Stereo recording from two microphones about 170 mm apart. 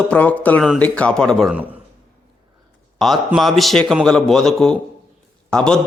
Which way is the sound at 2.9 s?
Centre (ahead or behind).